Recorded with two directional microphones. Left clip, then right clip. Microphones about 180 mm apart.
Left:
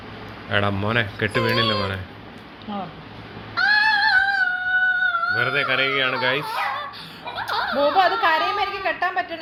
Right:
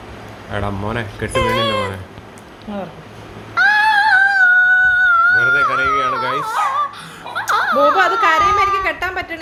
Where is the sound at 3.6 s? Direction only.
15° right (ahead or behind).